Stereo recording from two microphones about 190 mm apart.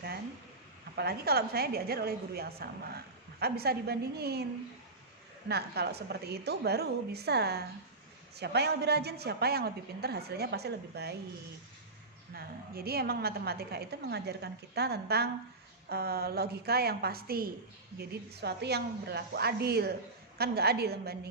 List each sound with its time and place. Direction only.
0.9 s a woman's voice: 55° right (ahead or behind)
5.5 s a woman's voice: 60° right (ahead or behind)
12.3 s a woman's voice: 55° right (ahead or behind)